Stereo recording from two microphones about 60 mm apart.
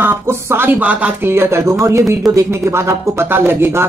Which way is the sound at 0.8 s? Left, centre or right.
Right.